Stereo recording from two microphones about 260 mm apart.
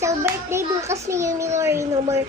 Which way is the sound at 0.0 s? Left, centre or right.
Centre.